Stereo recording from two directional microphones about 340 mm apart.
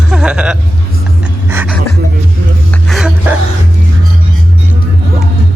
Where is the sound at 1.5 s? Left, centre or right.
Centre.